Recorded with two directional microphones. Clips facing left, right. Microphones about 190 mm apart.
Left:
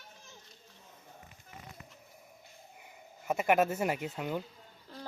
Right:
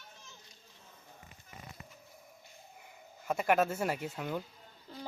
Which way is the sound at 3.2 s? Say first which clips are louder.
Left 2 dB; 5° left (ahead or behind).